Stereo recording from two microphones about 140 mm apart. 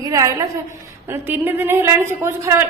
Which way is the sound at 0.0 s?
25° right (ahead or behind).